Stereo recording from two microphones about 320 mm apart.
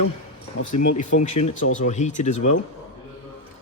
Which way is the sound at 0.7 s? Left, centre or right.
Left.